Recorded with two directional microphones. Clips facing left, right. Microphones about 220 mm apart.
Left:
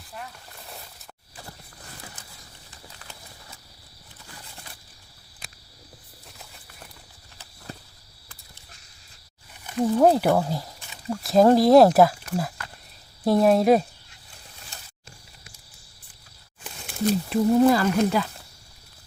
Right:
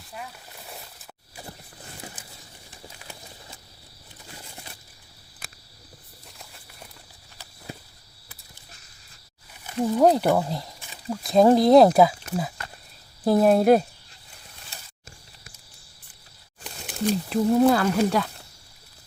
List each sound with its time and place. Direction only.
0.1 s speech: 5° right (ahead or behind)
2.0 s a sound: 25° right (ahead or behind)
10.0 s speech: 5° left (ahead or behind)
17.1 s speech: centre (ahead or behind)